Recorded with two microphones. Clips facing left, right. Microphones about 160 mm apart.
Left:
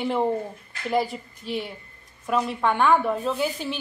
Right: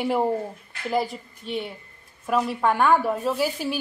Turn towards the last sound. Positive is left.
turn(degrees=-5)  # may be behind; listen again after turning